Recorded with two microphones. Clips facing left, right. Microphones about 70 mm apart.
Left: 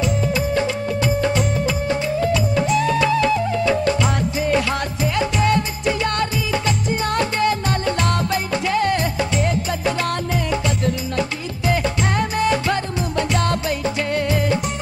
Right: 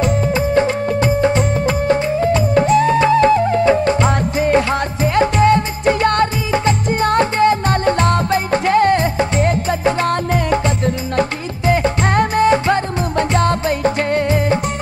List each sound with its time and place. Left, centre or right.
0.3 s music of bollywood: right
10.3 s music: right
11.1 s music: right
12.1 s music: right
12.4 s music: right
13.8 s music: right
14.2 s music: right